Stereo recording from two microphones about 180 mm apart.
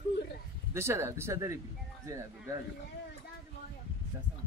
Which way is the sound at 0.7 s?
15° right (ahead or behind).